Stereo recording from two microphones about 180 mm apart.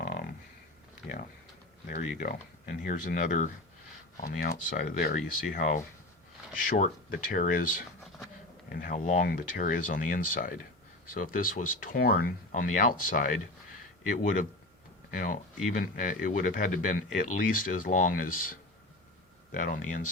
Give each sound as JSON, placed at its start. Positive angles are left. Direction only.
{"t": 1.9, "sound": "speech", "side_deg": 50}